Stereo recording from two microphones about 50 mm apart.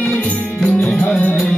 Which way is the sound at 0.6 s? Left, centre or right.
Centre.